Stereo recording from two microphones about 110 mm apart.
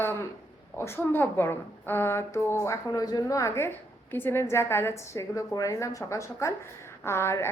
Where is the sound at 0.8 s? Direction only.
20° left (ahead or behind).